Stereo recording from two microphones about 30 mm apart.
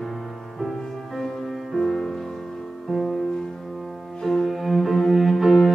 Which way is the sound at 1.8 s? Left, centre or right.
Centre.